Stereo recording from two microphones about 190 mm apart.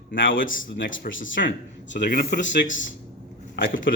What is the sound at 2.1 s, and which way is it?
Speech, 55° left (ahead or behind).